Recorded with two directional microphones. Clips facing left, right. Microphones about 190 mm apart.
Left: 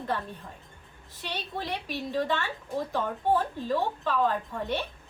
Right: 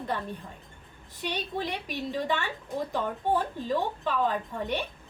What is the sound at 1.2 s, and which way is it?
A woman's voice, 15° right (ahead or behind).